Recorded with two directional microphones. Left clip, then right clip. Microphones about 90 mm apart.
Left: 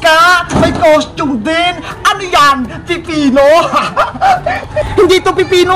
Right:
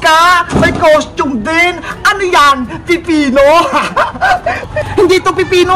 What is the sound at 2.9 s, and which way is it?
Speech, 45° right (ahead or behind).